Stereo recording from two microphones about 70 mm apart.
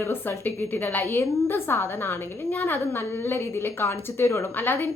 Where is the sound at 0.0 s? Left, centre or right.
Left.